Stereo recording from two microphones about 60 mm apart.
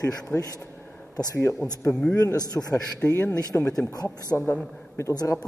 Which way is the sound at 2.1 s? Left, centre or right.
Left.